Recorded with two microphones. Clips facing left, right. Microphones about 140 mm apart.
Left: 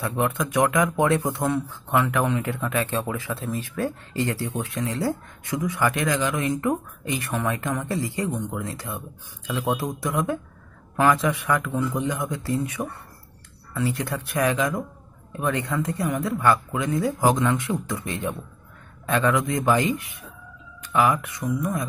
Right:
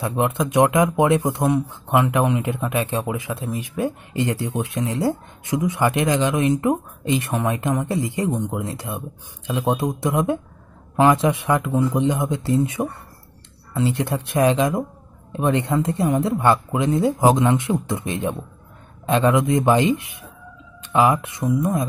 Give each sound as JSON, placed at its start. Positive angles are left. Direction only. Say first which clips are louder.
{"t": 0.0, "sound": "speech", "louder": "right 3 dB", "side_deg": -20}